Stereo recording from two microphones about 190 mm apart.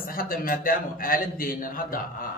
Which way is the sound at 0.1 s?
50° left (ahead or behind).